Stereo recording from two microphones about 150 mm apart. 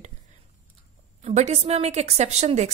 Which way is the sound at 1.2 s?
50° right (ahead or behind).